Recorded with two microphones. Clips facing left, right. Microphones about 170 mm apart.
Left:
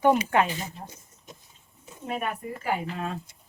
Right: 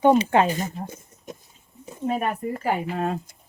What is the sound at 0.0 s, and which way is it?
Speech, 25° right (ahead or behind).